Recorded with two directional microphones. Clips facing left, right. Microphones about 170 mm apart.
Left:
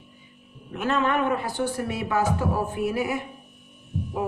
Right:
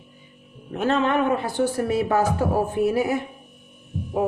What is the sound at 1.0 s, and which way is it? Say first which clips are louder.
A woman's voice: right 3 dB; 25° right (ahead or behind).